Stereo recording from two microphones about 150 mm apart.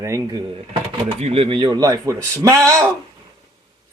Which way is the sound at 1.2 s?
40° right (ahead or behind).